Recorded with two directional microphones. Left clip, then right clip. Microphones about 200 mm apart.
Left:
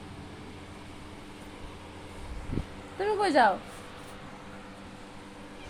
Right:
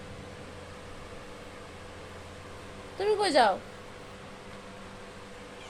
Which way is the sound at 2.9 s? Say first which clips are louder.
Even; 15° left (ahead or behind).